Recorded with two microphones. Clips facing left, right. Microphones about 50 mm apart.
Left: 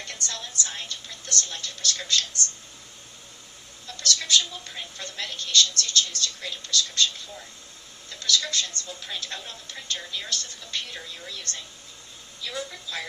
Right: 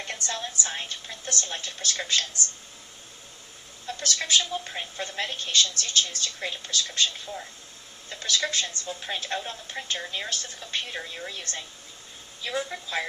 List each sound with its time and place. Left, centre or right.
0.3 s a woman's voice: right
3.8 s a woman's voice: right